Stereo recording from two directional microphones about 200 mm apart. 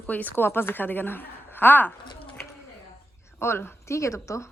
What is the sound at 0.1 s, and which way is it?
A woman's voice, 10° left (ahead or behind).